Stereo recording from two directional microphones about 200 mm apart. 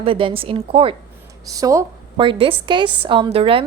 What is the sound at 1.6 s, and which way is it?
A woman's voice, 15° right (ahead or behind).